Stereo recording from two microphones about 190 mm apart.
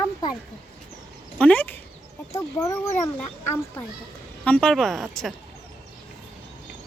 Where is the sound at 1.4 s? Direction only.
10° left (ahead or behind).